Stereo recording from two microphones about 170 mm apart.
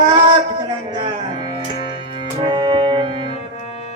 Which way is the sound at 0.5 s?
25° right (ahead or behind).